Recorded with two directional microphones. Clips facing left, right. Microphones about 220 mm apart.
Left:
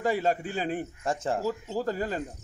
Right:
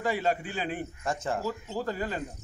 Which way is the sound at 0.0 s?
40° left (ahead or behind).